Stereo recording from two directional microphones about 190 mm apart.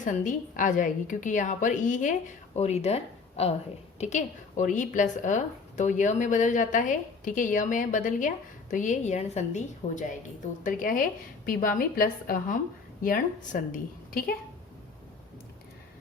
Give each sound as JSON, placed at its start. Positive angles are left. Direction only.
{"t": 0.0, "sound": "a woman's voice", "side_deg": 40}